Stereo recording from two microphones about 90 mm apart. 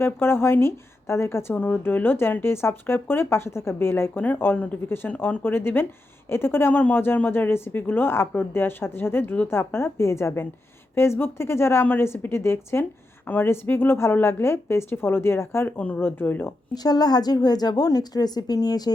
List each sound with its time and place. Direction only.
0.0 s a woman's voice: 25° left (ahead or behind)
16.7 s a woman's voice: 50° left (ahead or behind)